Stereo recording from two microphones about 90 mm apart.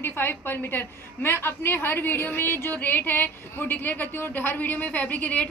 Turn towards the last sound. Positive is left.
turn(degrees=15)  # may be behind; listen again after turning